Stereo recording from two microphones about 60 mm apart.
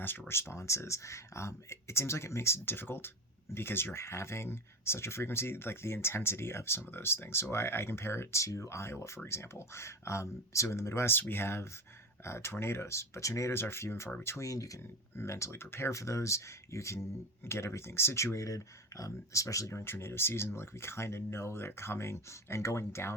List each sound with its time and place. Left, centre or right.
0.0 s speech: left
13.6 s speech: left
14.4 s speech: left
15.3 s speech: left
16.0 s speech: left
17.4 s speech: left
19.8 s speech: left